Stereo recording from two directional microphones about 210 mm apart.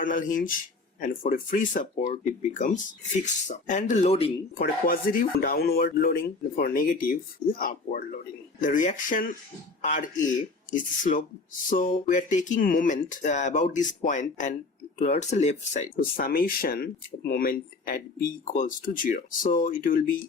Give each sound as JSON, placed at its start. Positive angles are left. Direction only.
{"t": 0.0, "sound": "speech", "side_deg": 40}
{"t": 4.5, "sound": "speech", "side_deg": 45}